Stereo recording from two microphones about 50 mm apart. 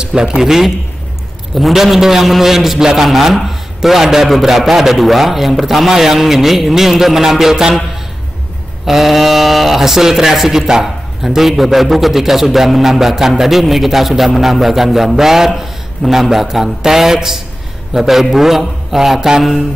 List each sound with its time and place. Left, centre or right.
0.0 s a man's voice: centre
0.4 s speech: centre
8.8 s a man's voice: centre